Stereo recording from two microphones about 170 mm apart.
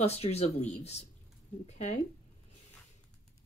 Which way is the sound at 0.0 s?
40° left (ahead or behind).